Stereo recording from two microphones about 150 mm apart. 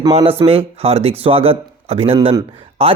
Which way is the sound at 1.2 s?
40° right (ahead or behind).